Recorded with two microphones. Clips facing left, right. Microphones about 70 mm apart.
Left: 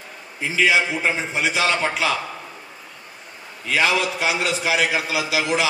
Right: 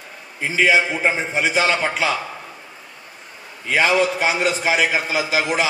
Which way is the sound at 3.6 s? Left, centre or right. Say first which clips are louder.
Right 3 dB; right.